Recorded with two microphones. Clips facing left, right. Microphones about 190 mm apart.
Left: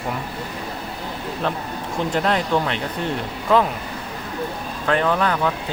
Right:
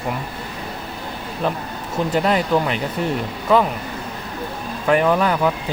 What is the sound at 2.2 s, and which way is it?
Speech, 5° right (ahead or behind).